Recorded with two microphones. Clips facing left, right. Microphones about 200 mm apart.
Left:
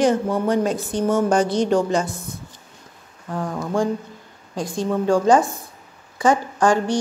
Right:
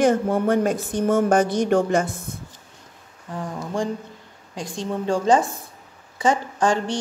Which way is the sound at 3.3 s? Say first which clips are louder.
Left 4 dB; 55° left (ahead or behind).